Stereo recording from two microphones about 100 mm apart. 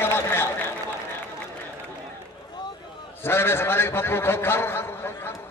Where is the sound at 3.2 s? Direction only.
25° left (ahead or behind).